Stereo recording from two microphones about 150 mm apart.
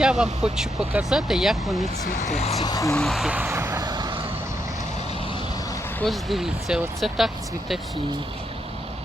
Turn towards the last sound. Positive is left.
turn(degrees=0)  # may be behind; listen again after turning